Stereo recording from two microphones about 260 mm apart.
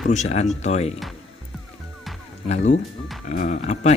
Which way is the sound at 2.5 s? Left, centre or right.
Left.